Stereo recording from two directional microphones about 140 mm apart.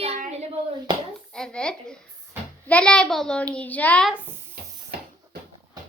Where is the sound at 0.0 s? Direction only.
60° right (ahead or behind).